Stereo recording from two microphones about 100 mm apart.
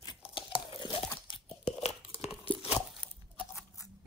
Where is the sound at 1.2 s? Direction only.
75° left (ahead or behind).